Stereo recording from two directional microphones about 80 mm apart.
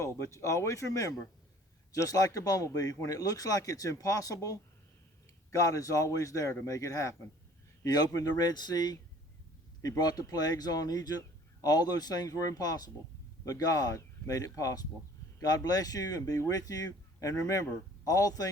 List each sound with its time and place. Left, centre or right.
0.0 s speech: left
7.9 s a man's voice: left